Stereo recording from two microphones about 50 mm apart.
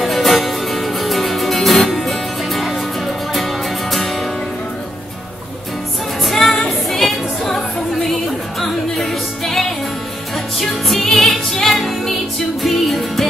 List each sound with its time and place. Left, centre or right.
0.0 s music: centre
6.2 s music: centre